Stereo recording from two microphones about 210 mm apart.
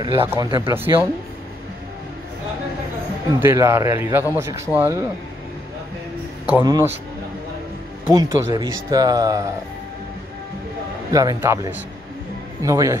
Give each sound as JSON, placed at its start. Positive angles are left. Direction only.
{"t": 0.0, "sound": "a man's voice", "side_deg": -25}
{"t": 3.3, "sound": "a man's voice", "side_deg": -10}
{"t": 6.6, "sound": "a man's voice", "side_deg": -20}
{"t": 8.1, "sound": "a man's voice", "side_deg": -15}
{"t": 11.1, "sound": "a man's voice", "side_deg": -15}